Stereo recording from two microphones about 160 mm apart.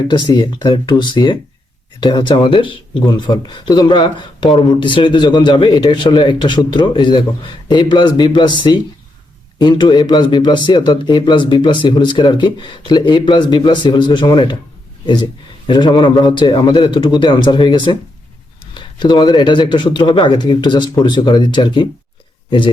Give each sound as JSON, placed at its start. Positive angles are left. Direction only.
{"t": 0.1, "sound": "speech", "side_deg": 25}